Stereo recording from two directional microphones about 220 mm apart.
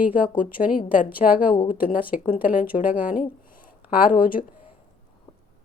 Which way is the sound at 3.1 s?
40° left (ahead or behind).